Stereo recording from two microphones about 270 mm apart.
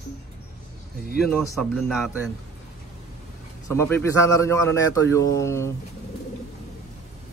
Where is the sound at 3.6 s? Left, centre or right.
Centre.